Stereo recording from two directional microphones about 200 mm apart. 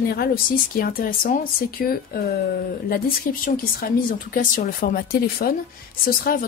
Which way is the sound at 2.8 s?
50° left (ahead or behind).